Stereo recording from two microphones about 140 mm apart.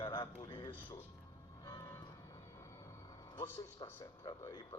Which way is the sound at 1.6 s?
20° left (ahead or behind).